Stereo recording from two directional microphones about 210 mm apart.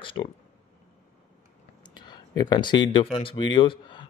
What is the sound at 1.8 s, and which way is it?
Speech, 20° left (ahead or behind).